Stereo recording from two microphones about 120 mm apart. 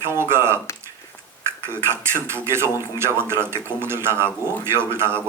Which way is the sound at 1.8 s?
20° right (ahead or behind).